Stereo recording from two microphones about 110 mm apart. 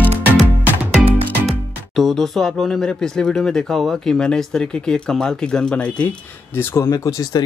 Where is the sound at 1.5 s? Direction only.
Centre (ahead or behind).